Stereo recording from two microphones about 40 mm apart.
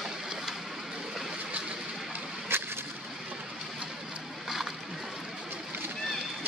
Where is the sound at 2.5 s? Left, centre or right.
Right.